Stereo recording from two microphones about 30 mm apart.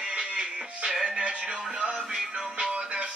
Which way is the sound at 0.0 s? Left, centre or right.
Right.